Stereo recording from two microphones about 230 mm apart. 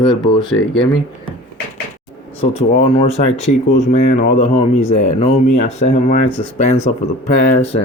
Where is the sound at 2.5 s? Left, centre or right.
Left.